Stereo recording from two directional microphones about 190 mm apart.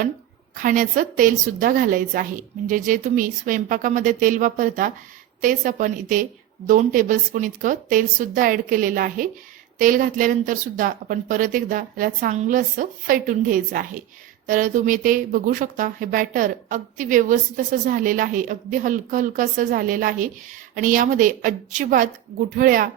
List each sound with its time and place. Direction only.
0.5 s a woman's voice: 45° right (ahead or behind)